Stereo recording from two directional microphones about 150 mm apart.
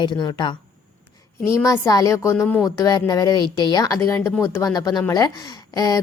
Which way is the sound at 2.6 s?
25° left (ahead or behind).